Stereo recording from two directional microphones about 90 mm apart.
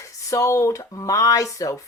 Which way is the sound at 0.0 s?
35° left (ahead or behind).